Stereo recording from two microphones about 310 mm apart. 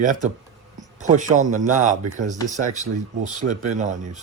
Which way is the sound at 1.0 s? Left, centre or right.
Right.